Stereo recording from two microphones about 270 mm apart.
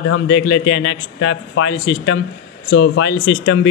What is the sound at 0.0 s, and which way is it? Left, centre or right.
Speech, left.